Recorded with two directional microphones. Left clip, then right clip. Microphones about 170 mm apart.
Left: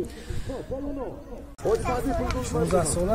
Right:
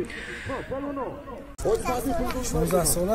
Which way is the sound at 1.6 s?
Centre (ahead or behind).